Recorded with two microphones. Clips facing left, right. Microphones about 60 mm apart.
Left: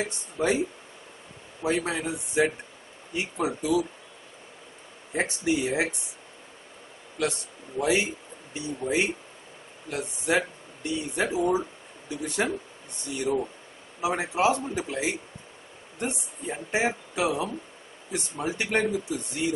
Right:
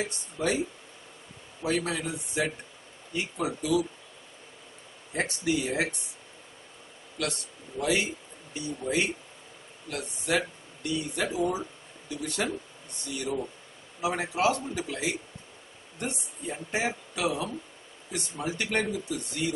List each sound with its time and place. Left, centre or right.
0.0 s speech: centre
1.6 s speech: left
5.1 s speech: left
7.2 s speech: centre